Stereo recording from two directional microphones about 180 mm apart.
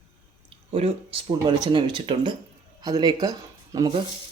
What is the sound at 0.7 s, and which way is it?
Speech, 30° right (ahead or behind).